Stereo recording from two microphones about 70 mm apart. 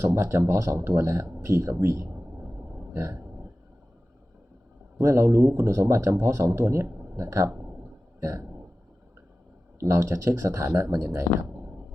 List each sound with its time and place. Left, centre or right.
0.0 s speech: right
2.9 s a sound: right
4.9 s a man's voice: right
5.2 s speech: right
7.2 s speech: right
9.8 s speech: right
11.3 s speech: left